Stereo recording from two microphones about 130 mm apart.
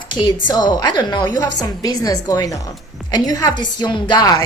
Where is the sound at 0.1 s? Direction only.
35° left (ahead or behind).